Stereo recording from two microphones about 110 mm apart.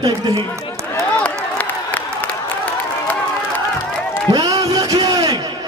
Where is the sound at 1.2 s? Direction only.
15° left (ahead or behind).